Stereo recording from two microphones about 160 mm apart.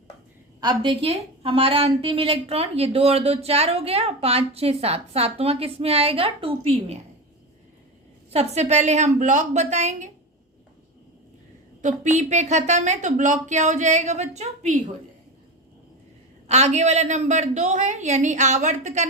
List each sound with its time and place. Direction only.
0.6 s a woman's voice: 30° right (ahead or behind)
8.3 s a woman's voice: 40° right (ahead or behind)
11.8 s a woman's voice: 50° right (ahead or behind)
16.5 s a woman's voice: 45° right (ahead or behind)